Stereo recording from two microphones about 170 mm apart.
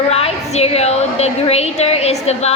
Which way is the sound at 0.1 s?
35° left (ahead or behind).